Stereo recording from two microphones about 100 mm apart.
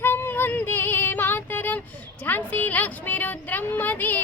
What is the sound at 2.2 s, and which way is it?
Speech, 15° left (ahead or behind).